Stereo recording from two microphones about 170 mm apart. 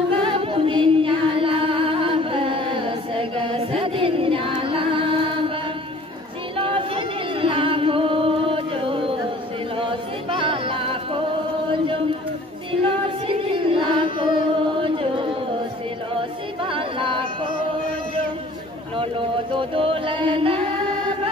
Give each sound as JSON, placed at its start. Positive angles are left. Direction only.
{"t": 0.1, "sound": "music", "side_deg": -30}
{"t": 6.5, "sound": "music", "side_deg": -30}
{"t": 12.8, "sound": "singing", "side_deg": -30}
{"t": 16.2, "sound": "a capella", "side_deg": -30}
{"t": 18.9, "sound": "chant", "side_deg": -30}